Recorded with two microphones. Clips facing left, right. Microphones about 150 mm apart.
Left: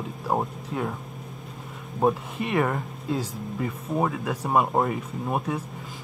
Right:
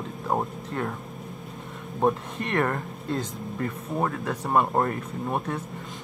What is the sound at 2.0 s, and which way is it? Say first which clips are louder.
Speech: left 1 dB; 5° left (ahead or behind).